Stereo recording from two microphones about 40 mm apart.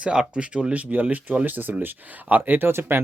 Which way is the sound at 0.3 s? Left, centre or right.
Right.